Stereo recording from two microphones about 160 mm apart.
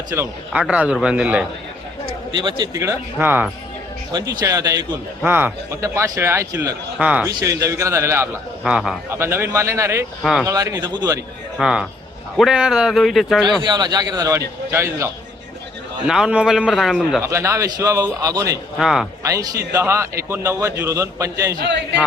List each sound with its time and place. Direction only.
0.1 s a man's voice: 15° right (ahead or behind)
2.3 s a man's voice: 30° right (ahead or behind); by 3.5 s 10° right (ahead or behind)
4.1 s a man's voice: 20° right (ahead or behind)
5.2 s a man's voice: 10° right (ahead or behind)
7.0 s a man's voice: 10° right (ahead or behind)
7.3 s a man's voice: 20° right (ahead or behind)
8.6 s a man's voice: 5° right (ahead or behind)
9.0 s a man's voice: 15° right (ahead or behind)
11.5 s a man's voice: 5° right (ahead or behind)
13.4 s a man's voice: 30° right (ahead or behind)
16.0 s a man's voice: 5° right (ahead or behind)
17.2 s a man's voice: 15° right (ahead or behind)
18.8 s a man's voice: 5° right (ahead or behind)
19.2 s a man's voice: 20° right (ahead or behind)